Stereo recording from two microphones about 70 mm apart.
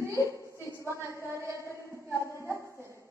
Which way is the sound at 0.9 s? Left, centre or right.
Right.